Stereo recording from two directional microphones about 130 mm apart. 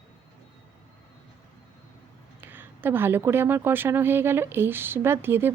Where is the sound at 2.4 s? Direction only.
15° right (ahead or behind).